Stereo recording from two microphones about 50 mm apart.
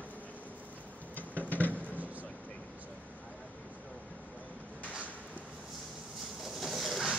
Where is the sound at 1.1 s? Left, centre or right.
Left.